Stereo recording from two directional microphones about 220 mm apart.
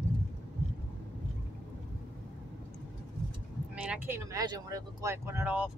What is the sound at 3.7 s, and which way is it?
Speech, 5° right (ahead or behind).